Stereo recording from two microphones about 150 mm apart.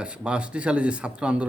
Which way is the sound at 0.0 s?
5° right (ahead or behind).